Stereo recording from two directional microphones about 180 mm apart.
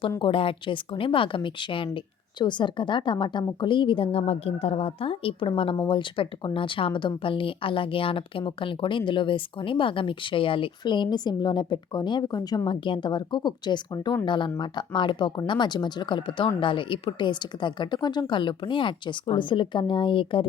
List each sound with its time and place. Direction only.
0.2 s speech: 30° left (ahead or behind)